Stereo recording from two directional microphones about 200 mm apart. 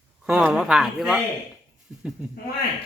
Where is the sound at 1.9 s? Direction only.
5° right (ahead or behind).